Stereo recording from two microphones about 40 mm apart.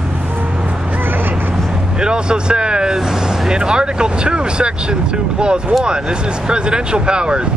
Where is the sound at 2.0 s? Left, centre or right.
Right.